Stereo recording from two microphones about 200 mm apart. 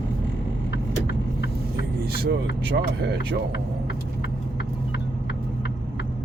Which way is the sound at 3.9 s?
55° left (ahead or behind).